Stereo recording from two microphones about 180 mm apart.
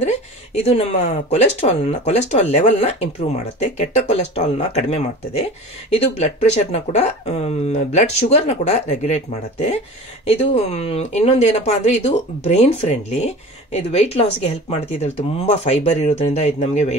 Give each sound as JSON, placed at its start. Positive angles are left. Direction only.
{"t": 0.7, "sound": "speech", "side_deg": 35}